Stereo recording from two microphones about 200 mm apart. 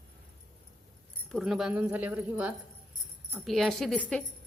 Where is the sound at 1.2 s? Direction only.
Centre (ahead or behind).